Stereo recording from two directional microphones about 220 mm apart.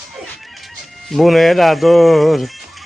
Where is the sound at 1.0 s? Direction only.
Centre (ahead or behind).